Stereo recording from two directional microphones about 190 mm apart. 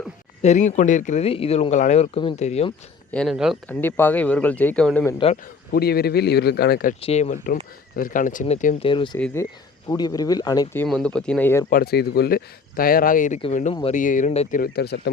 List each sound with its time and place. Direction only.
0.4 s speech: 40° left (ahead or behind)
3.1 s speech: centre (ahead or behind)
3.7 s speech: 10° left (ahead or behind)
5.1 s speech: 30° left (ahead or behind)
5.7 s speech: 55° left (ahead or behind)
7.0 s speech: 35° left (ahead or behind)
9.1 s speech: 10° left (ahead or behind)
10.8 s speech: 5° left (ahead or behind)
11.7 s speech: 55° left (ahead or behind); by 14.6 s 40° left (ahead or behind)
14.6 s speech: 60° left (ahead or behind)